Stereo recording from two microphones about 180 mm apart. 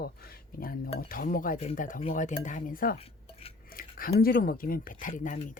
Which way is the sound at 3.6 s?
55° left (ahead or behind).